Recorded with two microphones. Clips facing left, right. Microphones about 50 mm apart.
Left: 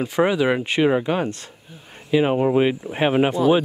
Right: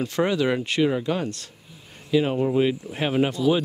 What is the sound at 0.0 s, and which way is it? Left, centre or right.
Speech, centre.